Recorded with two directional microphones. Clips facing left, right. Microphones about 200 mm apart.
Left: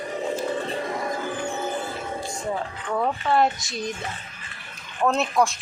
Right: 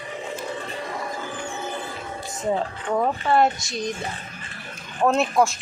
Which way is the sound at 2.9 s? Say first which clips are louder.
Right 2 dB; 15° right (ahead or behind).